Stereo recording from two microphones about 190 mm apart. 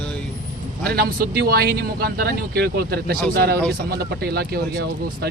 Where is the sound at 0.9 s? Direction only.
55° right (ahead or behind).